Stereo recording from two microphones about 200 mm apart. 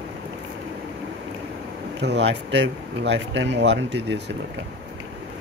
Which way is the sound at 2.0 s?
60° right (ahead or behind).